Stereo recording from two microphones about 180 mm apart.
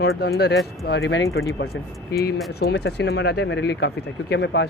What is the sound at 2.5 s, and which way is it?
Speech, 65° left (ahead or behind).